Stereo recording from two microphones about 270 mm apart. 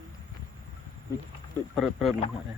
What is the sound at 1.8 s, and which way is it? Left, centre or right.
Speech, centre.